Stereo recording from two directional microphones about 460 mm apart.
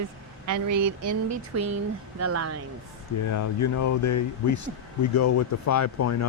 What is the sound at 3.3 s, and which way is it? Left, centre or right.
Speech, left.